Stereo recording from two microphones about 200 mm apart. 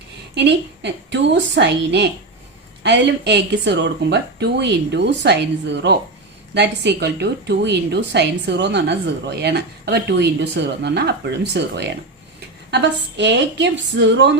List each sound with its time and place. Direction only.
0.3 s a woman's voice: 60° right (ahead or behind)